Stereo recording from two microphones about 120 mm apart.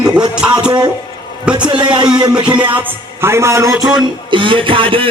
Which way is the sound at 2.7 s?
15° right (ahead or behind).